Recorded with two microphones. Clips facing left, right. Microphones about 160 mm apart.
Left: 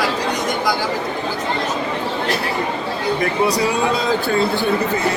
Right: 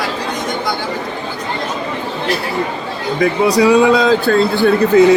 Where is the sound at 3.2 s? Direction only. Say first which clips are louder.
Right 8 dB; 90° right.